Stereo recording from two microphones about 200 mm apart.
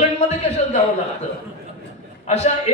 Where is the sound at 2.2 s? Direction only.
35° left (ahead or behind).